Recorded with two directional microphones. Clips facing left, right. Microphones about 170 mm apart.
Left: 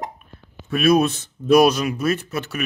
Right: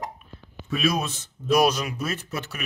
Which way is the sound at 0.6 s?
60° left (ahead or behind).